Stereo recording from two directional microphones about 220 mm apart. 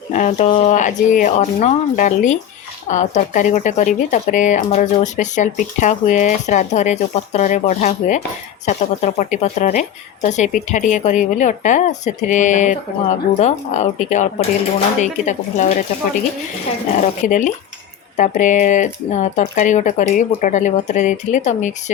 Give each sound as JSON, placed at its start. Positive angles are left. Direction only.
{"t": 0.1, "sound": "speech", "side_deg": 35}
{"t": 17.0, "sound": "speech", "side_deg": 35}